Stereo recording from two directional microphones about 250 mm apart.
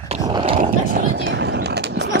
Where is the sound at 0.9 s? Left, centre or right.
Right.